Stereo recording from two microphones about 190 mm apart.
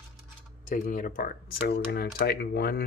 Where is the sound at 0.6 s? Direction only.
45° left (ahead or behind).